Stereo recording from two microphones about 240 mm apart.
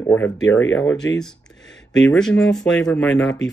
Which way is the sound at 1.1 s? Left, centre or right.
Centre.